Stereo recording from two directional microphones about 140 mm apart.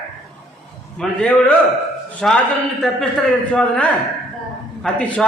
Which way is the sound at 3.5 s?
10° left (ahead or behind).